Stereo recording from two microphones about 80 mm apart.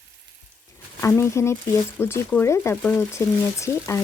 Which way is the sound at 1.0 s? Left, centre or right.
Left.